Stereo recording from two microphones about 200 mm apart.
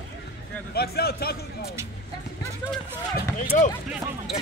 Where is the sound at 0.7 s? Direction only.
50° left (ahead or behind).